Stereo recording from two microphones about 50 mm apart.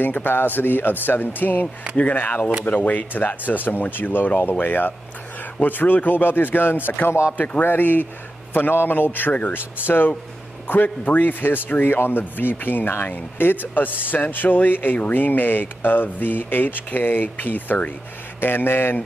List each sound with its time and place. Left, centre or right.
0.0 s speech: left
7.3 s speech: left
7.6 s a man's voice: left